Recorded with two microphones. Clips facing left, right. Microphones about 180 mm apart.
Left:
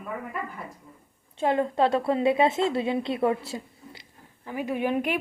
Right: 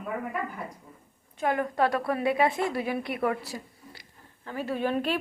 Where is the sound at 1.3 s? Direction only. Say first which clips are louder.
Left 3 dB; 25° left (ahead or behind).